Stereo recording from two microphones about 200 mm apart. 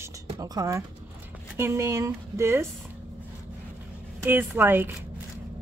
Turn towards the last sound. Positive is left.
turn(degrees=-10)  # may be behind; listen again after turning